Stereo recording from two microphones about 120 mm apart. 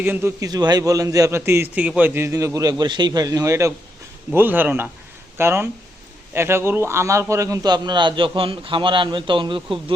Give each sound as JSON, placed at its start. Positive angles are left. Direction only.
{"t": 0.0, "sound": "a man's voice", "side_deg": -15}
{"t": 0.4, "sound": "a man's voice", "side_deg": -35}